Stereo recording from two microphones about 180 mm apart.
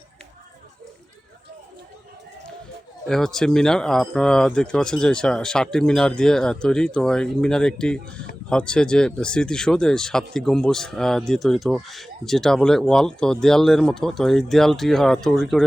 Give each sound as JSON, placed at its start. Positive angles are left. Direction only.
{"t": 3.1, "sound": "speech", "side_deg": 5}